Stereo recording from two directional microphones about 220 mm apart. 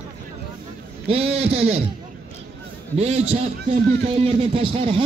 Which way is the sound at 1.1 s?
25° right (ahead or behind).